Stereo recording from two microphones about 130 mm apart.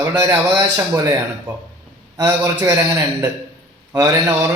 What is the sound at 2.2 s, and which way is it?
Speech, 25° right (ahead or behind).